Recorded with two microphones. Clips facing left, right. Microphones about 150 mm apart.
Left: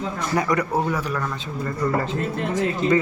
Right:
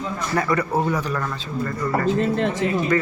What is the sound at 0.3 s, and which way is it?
Speech, 15° left (ahead or behind).